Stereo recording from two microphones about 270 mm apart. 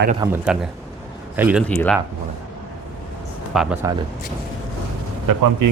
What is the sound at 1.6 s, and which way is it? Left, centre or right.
Speech, centre.